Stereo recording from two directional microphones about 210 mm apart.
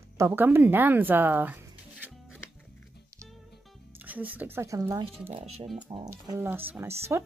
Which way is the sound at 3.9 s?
10° right (ahead or behind).